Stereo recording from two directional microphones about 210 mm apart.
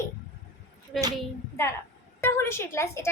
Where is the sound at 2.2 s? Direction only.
10° left (ahead or behind).